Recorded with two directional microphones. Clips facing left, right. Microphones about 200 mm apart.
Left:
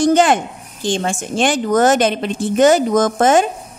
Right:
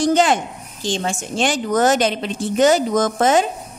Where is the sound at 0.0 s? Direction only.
50° left (ahead or behind).